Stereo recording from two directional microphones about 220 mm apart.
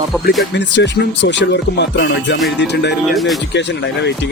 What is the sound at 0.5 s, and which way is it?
Speech, 55° left (ahead or behind).